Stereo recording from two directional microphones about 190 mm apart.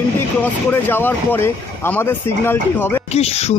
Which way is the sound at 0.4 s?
10° left (ahead or behind).